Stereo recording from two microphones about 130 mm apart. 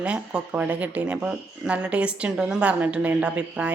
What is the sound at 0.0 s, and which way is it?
Speech, 10° right (ahead or behind).